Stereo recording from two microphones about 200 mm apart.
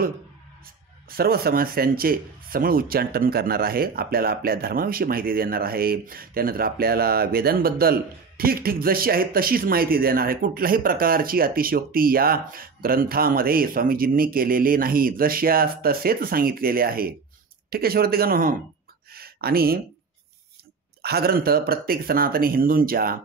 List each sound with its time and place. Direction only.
1.1 s speech: 50° right (ahead or behind)
21.0 s speech: 50° right (ahead or behind)